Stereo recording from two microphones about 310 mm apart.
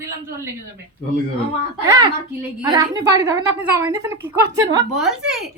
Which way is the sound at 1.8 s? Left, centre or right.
Centre.